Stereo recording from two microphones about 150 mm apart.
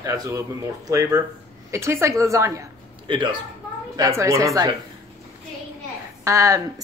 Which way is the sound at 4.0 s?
20° right (ahead or behind).